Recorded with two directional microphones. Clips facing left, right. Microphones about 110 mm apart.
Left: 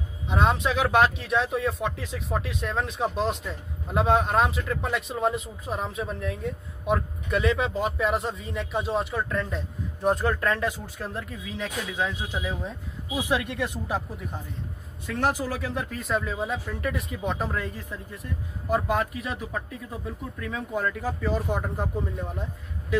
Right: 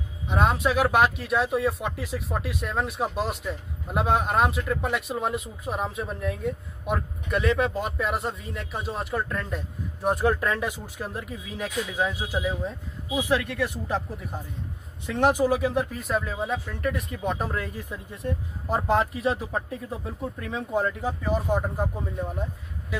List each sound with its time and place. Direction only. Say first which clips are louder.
0.3 s speech: right 1 dB; centre (ahead or behind)
10.0 s speech: even; 15° right (ahead or behind)
13.2 s speech: right 2 dB; 15° left (ahead or behind)
15.0 s speech: right 5 dB; 20° right (ahead or behind); by 17.6 s 5° right (ahead or behind)
17.8 s speech: right 5 dB; 25° right (ahead or behind)
21.2 s speech: right 3 dB; 15° right (ahead or behind)